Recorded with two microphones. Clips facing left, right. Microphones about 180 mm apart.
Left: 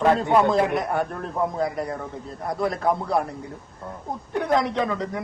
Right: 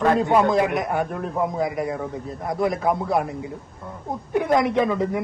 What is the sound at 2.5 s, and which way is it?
Speech, 20° right (ahead or behind).